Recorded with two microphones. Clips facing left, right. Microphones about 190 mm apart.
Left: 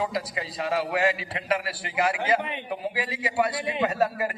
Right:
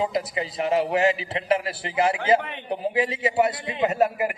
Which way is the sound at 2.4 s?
15° left (ahead or behind).